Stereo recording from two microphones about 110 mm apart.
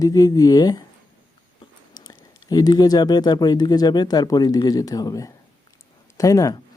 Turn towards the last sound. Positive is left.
turn(degrees=30)  # may be behind; listen again after turning